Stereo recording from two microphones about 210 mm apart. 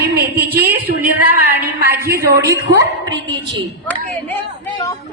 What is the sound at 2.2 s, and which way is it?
Speech, 50° right (ahead or behind).